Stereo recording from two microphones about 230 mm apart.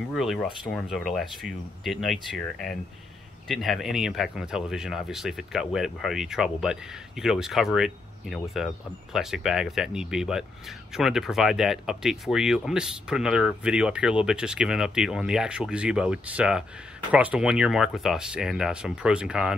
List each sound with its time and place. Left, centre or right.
0.1 s speech: centre